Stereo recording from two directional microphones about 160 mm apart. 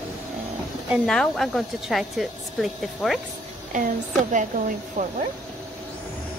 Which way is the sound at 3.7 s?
50° right (ahead or behind).